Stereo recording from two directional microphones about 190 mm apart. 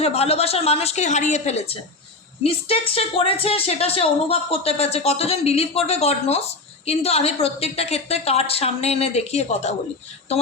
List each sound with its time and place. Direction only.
0.0 s speech: 30° left (ahead or behind)